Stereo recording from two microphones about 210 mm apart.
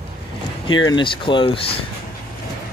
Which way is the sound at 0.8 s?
20° left (ahead or behind).